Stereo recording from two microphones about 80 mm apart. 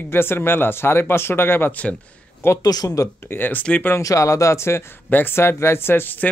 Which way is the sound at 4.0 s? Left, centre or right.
Left.